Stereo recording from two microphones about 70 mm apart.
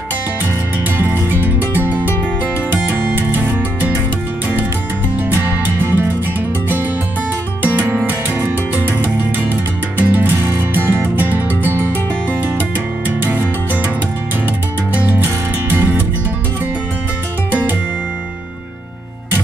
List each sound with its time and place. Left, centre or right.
0.9 s music: right
5.3 s music: right
7.6 s music: right
15.0 s music: right
17.5 s music: right